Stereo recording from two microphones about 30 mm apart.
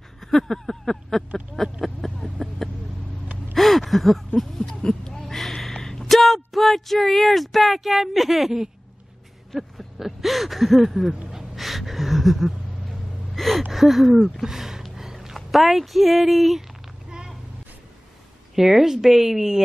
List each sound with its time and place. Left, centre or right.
0.2 s a sound: centre
1.6 s vehicle: centre
2.0 s vehicle: centre
2.3 s vehicle: centre
3.5 s gasp: centre
4.6 s a sound: left
6.0 s speech: centre
9.9 s speech: centre
11.2 s a sound: centre
13.4 s speech: centre
14.4 s a sound: centre
15.3 s speech: centre
18.5 s a woman's voice: centre